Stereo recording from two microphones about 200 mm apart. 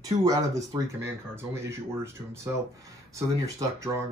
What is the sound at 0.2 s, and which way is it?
Speech, 15° right (ahead or behind).